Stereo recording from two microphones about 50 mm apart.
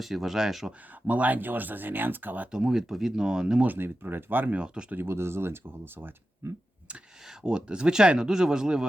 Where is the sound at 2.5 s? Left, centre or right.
Centre.